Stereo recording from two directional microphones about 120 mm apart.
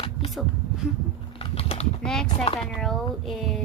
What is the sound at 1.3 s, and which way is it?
Typing, 55° left (ahead or behind).